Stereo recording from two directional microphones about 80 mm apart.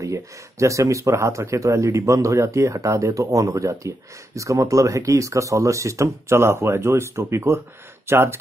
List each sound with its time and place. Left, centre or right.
0.0 s speech: right